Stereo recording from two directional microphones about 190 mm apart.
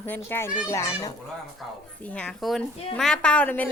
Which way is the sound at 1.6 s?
Centre (ahead or behind).